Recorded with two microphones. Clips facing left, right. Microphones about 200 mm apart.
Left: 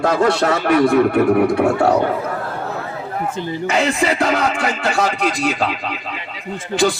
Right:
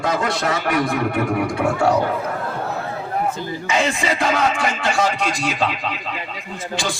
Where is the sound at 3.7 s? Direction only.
60° left (ahead or behind).